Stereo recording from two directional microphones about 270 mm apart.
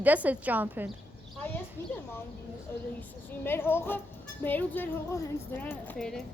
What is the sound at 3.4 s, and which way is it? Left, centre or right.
A woman's voice, centre.